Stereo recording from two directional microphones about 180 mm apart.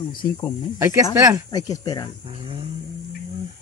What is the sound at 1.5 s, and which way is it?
Speech, 20° left (ahead or behind).